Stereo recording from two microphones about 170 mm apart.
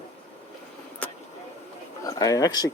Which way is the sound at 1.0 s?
10° left (ahead or behind).